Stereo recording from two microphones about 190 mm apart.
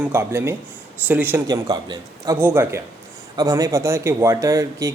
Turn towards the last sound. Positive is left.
turn(degrees=-15)  # may be behind; listen again after turning